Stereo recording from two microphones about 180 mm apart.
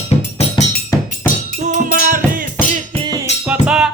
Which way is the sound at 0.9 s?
20° left (ahead or behind).